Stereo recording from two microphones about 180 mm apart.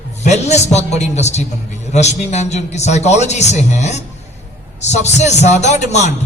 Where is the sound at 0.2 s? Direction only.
40° left (ahead or behind).